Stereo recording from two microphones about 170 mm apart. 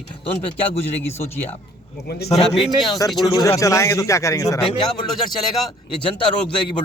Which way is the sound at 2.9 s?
20° left (ahead or behind).